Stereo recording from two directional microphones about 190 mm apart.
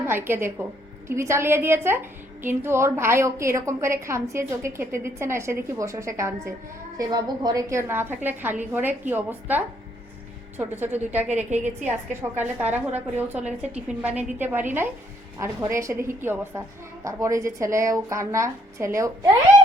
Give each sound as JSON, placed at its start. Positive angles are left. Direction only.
{"t": 0.0, "sound": "a woman's voice", "side_deg": -10}